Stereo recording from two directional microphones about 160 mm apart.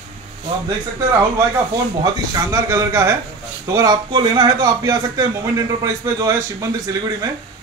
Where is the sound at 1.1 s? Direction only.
20° right (ahead or behind).